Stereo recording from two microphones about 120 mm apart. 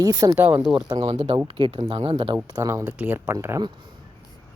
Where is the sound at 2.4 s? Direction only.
30° right (ahead or behind).